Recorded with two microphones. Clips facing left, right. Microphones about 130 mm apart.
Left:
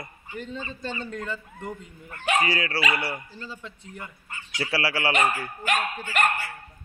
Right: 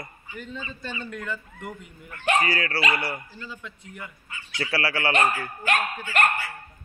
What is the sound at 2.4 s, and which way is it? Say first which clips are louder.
A man's voice: even; 25° left (ahead or behind).